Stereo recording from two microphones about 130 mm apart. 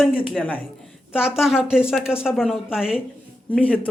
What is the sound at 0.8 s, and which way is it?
A woman's voice, 5° right (ahead or behind).